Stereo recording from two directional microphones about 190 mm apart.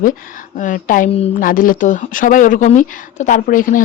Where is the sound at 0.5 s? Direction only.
45° left (ahead or behind).